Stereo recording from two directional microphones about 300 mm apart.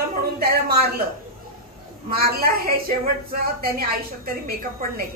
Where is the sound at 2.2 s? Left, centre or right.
Right.